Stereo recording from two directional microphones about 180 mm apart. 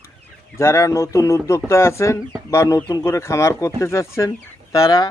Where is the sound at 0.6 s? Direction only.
15° left (ahead or behind).